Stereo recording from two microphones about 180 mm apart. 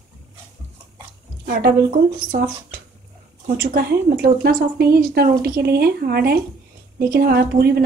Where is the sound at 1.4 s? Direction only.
50° right (ahead or behind).